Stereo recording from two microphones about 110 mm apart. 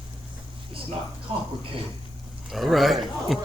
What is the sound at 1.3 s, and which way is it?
Speech, 60° right (ahead or behind).